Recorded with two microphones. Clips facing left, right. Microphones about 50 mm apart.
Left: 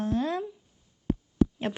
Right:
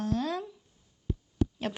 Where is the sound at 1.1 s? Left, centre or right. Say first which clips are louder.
Left 7 dB; left.